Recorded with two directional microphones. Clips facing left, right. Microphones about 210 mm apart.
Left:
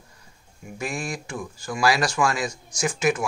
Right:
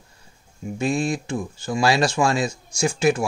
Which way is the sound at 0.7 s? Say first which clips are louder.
Right 8 dB; 25° right (ahead or behind).